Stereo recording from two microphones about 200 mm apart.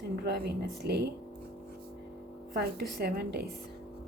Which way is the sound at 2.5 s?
50° right (ahead or behind).